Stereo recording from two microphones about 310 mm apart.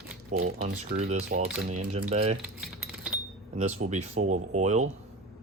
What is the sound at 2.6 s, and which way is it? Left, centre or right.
Typing, centre.